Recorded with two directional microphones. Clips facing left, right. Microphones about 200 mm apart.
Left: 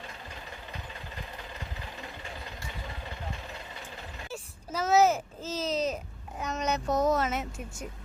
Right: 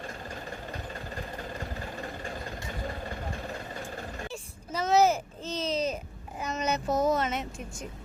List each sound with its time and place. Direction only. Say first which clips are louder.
0.0 s vehicle: right 5 dB; 45° right (ahead or behind)
4.3 s a sound: even; 5° left (ahead or behind)
6.4 s a woman's voice: even; centre (ahead or behind)